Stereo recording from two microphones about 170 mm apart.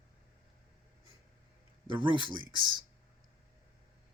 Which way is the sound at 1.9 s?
30° right (ahead or behind).